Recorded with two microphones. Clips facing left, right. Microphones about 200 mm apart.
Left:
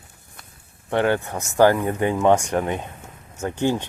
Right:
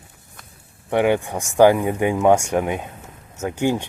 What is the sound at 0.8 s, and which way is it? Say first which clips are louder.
Speech: right 2 dB; 15° right (ahead or behind).